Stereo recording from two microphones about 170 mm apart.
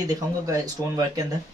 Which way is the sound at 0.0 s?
20° right (ahead or behind).